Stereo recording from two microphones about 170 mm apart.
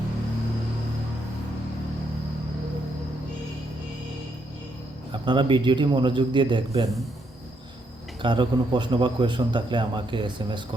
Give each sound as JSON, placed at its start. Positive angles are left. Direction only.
{"t": 5.1, "sound": "a man's voice", "side_deg": -30}
{"t": 8.2, "sound": "a man's voice", "side_deg": -30}